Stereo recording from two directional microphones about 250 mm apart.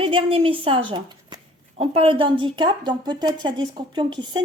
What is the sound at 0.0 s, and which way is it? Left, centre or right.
Speech, right.